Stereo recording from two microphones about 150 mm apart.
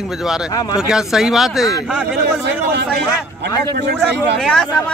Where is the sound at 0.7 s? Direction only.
5° right (ahead or behind).